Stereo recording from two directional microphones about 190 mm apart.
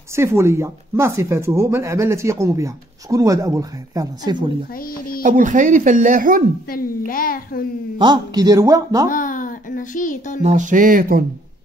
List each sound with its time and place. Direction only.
0.1 s speech: 15° right (ahead or behind)
4.7 s a child's voice: 50° left (ahead or behind)
5.2 s speech: 40° right (ahead or behind)
7.1 s a child's voice: 50° left (ahead or behind)
8.0 s speech: 20° right (ahead or behind)
9.1 s music: 45° left (ahead or behind)
10.4 s speech: 40° right (ahead or behind)